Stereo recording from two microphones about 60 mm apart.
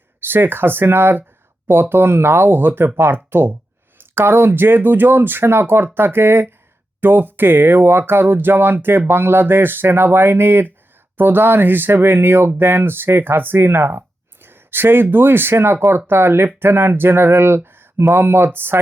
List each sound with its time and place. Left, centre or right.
0.2 s speech: right
14.4 s a sound: right
15.1 s speech: right